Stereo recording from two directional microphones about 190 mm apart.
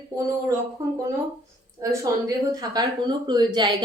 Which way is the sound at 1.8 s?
15° right (ahead or behind).